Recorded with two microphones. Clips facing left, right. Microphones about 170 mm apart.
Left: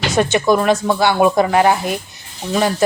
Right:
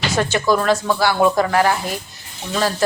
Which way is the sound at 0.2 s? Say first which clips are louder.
Left 4 dB; 20° left (ahead or behind).